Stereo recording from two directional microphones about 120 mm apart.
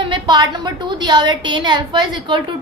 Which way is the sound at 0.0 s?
40° right (ahead or behind).